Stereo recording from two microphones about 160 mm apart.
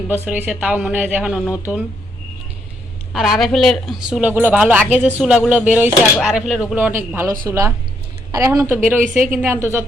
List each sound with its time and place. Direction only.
0.1 s speech: 10° right (ahead or behind)
3.1 s speech: centre (ahead or behind)